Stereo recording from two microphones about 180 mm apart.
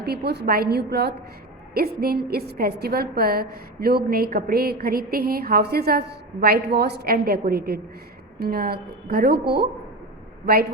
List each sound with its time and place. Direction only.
0.0 s a woman's voice: 65° right (ahead or behind)